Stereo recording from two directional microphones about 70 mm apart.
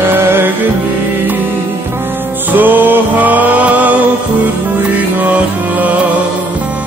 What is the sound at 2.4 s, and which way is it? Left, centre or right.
Music, right.